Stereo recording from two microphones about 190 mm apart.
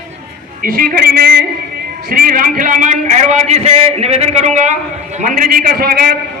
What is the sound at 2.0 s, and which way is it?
A man's voice, 50° right (ahead or behind).